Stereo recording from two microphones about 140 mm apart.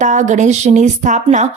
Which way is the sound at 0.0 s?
60° right (ahead or behind).